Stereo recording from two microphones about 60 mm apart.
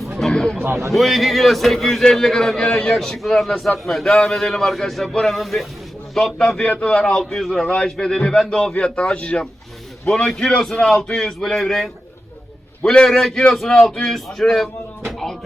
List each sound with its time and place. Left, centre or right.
0.2 s a sound: centre
0.6 s a man's voice: right
0.9 s a man's voice: centre; by 9.5 s left
10.1 s a man's voice: centre